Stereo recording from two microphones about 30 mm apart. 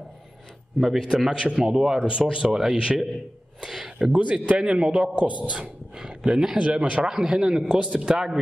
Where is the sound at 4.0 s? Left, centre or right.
Right.